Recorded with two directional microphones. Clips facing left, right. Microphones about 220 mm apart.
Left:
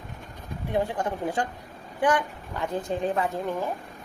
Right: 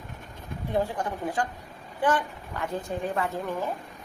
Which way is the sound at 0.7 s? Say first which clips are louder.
Left 1 dB; 20° left (ahead or behind).